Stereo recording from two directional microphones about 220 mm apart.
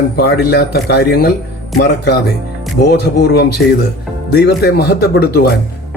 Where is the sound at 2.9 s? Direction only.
45° left (ahead or behind).